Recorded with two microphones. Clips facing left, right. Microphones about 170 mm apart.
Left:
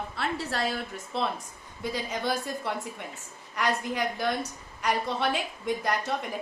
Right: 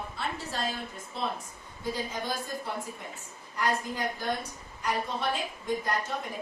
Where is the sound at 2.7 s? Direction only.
80° left.